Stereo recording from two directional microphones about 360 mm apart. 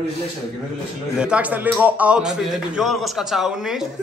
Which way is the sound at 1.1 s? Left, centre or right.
Centre.